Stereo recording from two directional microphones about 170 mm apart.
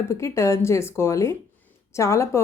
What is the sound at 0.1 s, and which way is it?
A woman's voice, 15° left (ahead or behind).